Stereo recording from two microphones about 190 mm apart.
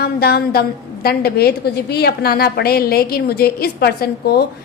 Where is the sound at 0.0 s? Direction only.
55° left (ahead or behind).